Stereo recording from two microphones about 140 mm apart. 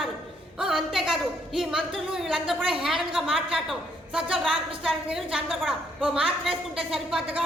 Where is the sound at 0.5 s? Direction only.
5° right (ahead or behind).